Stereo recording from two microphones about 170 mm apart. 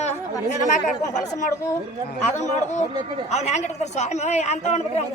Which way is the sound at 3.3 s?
40° left (ahead or behind).